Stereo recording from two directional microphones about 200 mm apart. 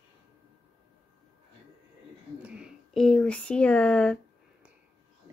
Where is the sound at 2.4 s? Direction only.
5° right (ahead or behind).